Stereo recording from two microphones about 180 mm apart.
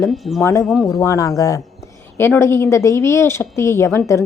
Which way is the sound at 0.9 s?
15° left (ahead or behind).